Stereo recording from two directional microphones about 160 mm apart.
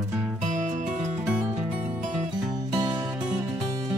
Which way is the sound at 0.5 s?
50° right (ahead or behind).